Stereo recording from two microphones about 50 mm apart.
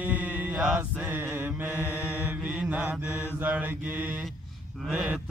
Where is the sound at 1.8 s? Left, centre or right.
Left.